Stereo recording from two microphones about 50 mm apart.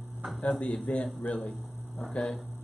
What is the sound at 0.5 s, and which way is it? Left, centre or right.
Speech, centre.